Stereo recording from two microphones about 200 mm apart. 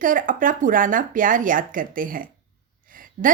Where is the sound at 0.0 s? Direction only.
40° right (ahead or behind).